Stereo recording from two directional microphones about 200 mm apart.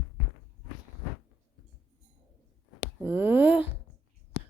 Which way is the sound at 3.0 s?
10° right (ahead or behind).